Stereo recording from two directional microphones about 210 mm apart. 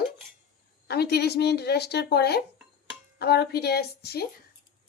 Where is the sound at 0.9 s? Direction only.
50° left (ahead or behind).